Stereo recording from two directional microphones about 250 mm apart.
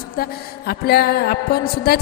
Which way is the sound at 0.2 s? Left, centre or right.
Left.